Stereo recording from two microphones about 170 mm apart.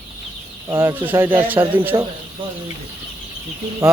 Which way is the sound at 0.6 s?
15° right (ahead or behind).